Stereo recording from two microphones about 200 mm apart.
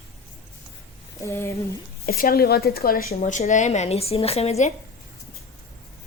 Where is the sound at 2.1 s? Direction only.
50° left (ahead or behind).